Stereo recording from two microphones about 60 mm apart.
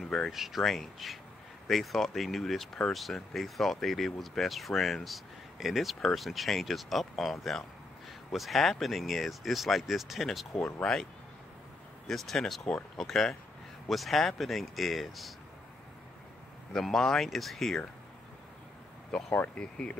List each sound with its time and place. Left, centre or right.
0.3 s speech: centre
10.6 s speech: centre
12.1 s speech: centre
12.6 s speech: centre
16.7 s speech: centre
19.5 s speech: centre